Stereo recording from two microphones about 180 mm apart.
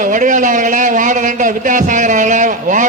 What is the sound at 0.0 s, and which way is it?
Speech, 45° right (ahead or behind).